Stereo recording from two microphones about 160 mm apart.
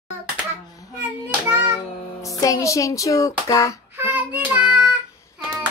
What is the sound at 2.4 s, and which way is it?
Child singing, 20° left (ahead or behind).